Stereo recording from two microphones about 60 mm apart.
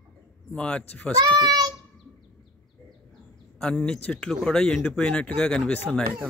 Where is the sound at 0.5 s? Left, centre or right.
Centre.